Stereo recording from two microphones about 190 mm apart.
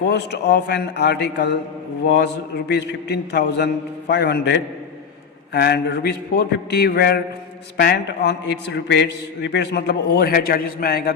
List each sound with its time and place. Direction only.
0.0 s a man's voice: 65° left (ahead or behind)